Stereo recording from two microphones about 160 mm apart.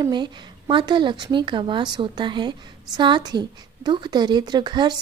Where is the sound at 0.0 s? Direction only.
30° right (ahead or behind).